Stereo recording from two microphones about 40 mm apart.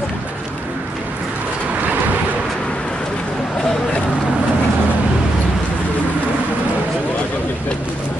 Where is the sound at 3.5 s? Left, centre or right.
Centre.